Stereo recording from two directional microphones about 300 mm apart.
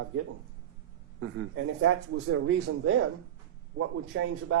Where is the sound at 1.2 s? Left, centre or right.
Right.